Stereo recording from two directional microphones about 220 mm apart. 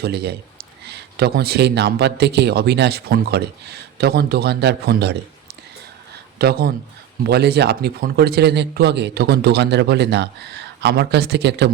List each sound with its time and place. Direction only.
0.0 s a man's voice: 45° right (ahead or behind)